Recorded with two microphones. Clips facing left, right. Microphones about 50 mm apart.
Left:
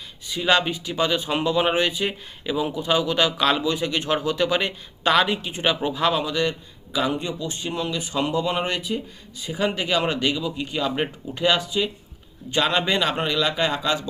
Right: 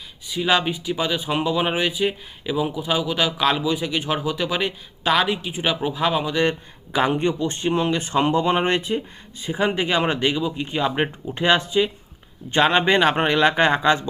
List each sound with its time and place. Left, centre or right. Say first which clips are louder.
0.3 s speech: even; centre
6.3 s speech: right 3 dB; right
9.4 s speech: right 3 dB; right